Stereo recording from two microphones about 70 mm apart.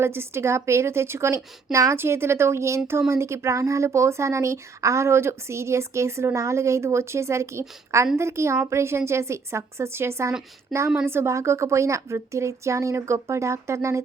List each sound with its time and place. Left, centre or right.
0.0 s a woman's voice: right